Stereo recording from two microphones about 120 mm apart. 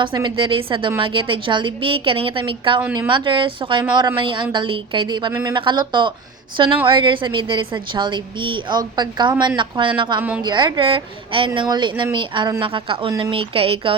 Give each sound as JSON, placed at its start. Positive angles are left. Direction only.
{"t": 0.0, "sound": "a woman's voice", "side_deg": -40}
{"t": 5.3, "sound": "speech", "side_deg": -25}
{"t": 5.5, "sound": "a woman's voice", "side_deg": -40}
{"t": 10.2, "sound": "a woman's voice", "side_deg": -10}
{"t": 10.4, "sound": "a woman's voice", "side_deg": -40}
{"t": 13.1, "sound": "a woman's voice", "side_deg": -35}
{"t": 13.3, "sound": "a woman's voice", "side_deg": -50}